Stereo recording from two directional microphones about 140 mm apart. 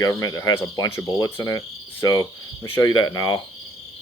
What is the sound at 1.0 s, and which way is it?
Cricket, 25° left (ahead or behind).